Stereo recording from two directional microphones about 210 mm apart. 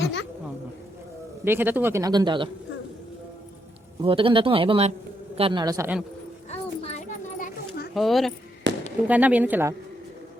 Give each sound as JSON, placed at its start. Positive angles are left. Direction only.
{"t": 0.0, "sound": "speech", "side_deg": 55}
{"t": 1.5, "sound": "speech", "side_deg": -10}
{"t": 4.0, "sound": "speech", "side_deg": -25}
{"t": 6.5, "sound": "children playing", "side_deg": 35}
{"t": 7.9, "sound": "speech", "side_deg": 0}
{"t": 8.7, "sound": "fireworks", "side_deg": -60}
{"t": 9.0, "sound": "speech", "side_deg": -5}